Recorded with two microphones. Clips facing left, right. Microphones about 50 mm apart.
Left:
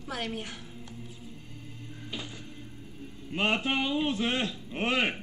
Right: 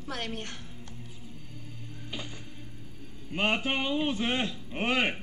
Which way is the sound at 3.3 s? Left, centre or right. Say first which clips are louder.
Even; centre.